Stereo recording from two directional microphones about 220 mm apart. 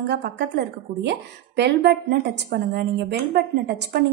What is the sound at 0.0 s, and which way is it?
Speech, 50° right (ahead or behind).